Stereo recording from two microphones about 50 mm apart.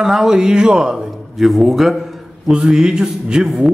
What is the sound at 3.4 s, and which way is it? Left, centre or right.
Speech, centre.